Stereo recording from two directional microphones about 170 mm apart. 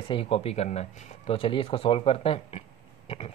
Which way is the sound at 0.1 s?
35° left (ahead or behind).